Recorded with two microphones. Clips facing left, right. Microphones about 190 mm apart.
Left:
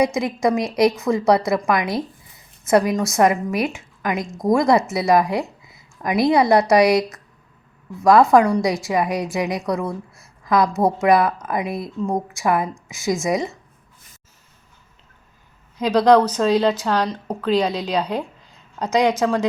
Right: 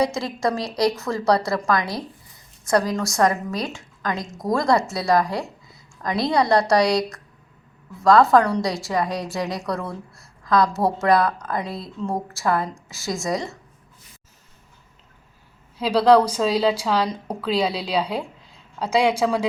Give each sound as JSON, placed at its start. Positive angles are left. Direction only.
{"t": 0.0, "sound": "a woman's voice", "side_deg": 20}
{"t": 8.0, "sound": "a woman's voice", "side_deg": 20}
{"t": 11.0, "sound": "a woman's voice", "side_deg": 20}
{"t": 15.8, "sound": "a woman's voice", "side_deg": -5}